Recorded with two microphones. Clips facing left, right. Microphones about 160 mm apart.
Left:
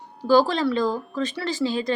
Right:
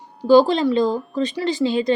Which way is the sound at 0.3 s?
20° right (ahead or behind).